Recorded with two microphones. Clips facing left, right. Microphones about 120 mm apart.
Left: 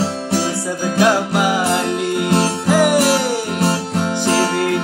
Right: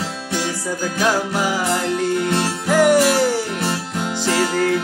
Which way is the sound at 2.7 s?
10° left (ahead or behind).